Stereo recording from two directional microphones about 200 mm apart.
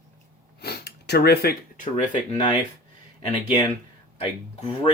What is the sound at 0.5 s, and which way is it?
Speech, 55° left (ahead or behind).